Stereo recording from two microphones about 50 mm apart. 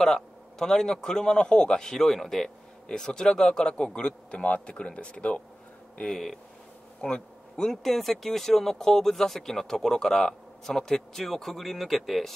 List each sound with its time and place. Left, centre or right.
0.0 s a man's voice: centre
5.9 s speech: centre
7.0 s bee: centre
7.7 s speech: centre